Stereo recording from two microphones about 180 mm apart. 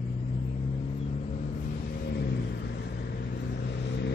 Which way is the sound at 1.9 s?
60° left (ahead or behind).